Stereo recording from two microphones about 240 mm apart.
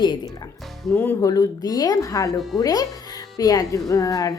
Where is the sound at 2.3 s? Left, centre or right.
Centre.